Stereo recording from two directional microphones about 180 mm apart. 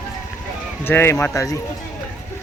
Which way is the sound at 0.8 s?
10° left (ahead or behind).